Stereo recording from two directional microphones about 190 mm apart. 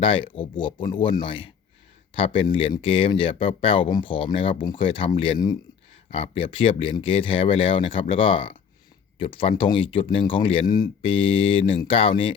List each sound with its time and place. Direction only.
0.0 s speech: 30° left (ahead or behind)